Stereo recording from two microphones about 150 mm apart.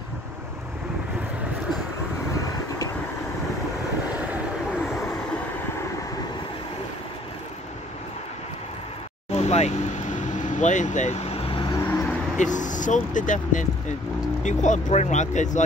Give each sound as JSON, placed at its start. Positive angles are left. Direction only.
{"t": 9.3, "sound": "vehicle", "side_deg": 45}
{"t": 11.7, "sound": "vehicle", "side_deg": 15}
{"t": 12.4, "sound": "speech", "side_deg": 55}